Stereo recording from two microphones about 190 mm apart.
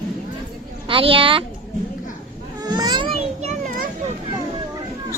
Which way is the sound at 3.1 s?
35° right (ahead or behind).